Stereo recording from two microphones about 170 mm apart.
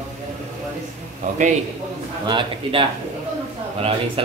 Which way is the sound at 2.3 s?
30° right (ahead or behind).